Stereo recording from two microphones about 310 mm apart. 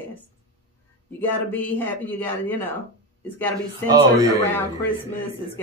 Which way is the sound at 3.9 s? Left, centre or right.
Centre.